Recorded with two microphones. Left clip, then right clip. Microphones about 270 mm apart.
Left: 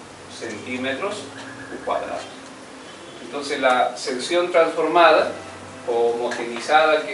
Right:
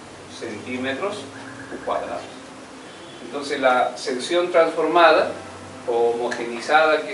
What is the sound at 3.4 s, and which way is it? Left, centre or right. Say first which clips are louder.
A man's voice: even; centre.